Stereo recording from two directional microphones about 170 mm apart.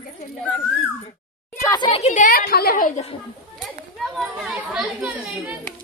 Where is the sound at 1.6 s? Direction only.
30° left (ahead or behind); by 2.9 s 55° left (ahead or behind).